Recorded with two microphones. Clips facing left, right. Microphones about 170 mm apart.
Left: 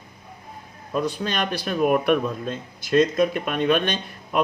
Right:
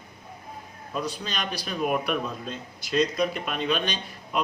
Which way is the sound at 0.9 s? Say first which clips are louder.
Left 6 dB; 50° left (ahead or behind).